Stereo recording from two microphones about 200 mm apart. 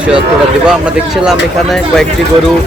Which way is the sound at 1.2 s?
Centre (ahead or behind).